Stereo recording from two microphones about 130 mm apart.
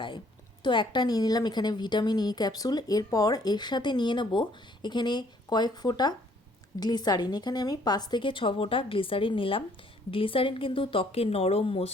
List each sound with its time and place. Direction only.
0.6 s a woman's voice: 35° left (ahead or behind)